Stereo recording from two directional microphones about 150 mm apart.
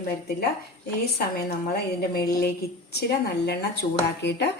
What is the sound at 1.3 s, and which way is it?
A woman's voice, 90° left.